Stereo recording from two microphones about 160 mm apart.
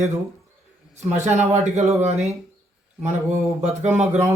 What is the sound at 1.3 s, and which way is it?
A man's voice, 45° right (ahead or behind).